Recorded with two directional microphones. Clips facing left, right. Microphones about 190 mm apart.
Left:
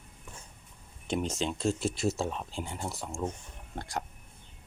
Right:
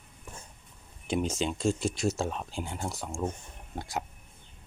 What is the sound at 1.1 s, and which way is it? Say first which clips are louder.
Speech: right 2 dB; centre (ahead or behind).